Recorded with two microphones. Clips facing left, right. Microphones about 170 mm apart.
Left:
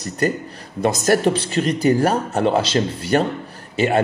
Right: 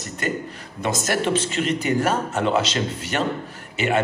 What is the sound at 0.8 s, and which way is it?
A man's voice, 40° left (ahead or behind).